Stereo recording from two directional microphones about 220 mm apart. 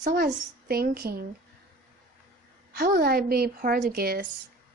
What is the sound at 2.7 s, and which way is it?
A woman's voice, 45° right (ahead or behind).